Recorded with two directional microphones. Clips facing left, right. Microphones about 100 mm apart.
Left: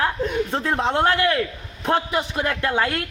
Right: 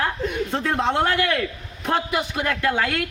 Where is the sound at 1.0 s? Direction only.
30° left (ahead or behind).